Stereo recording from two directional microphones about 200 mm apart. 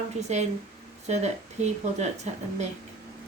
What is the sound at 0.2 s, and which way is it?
A woman's voice, 35° right (ahead or behind).